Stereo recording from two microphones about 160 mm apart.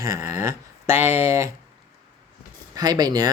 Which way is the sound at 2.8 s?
25° right (ahead or behind).